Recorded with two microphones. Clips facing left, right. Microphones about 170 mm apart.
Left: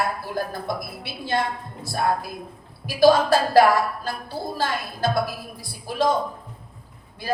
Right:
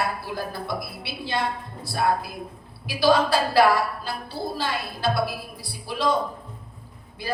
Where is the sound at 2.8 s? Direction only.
45° left (ahead or behind).